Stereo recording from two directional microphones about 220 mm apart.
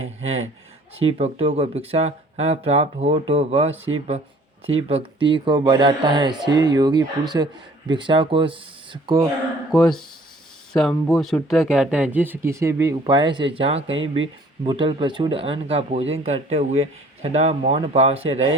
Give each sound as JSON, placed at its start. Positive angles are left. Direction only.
{"t": 0.2, "sound": "speech", "side_deg": -30}
{"t": 9.7, "sound": "speech", "side_deg": 0}